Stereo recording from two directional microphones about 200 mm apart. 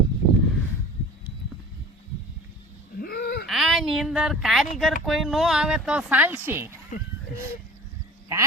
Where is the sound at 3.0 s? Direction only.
50° left (ahead or behind).